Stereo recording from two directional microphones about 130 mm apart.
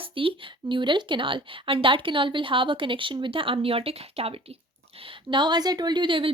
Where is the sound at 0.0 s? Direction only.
45° right (ahead or behind).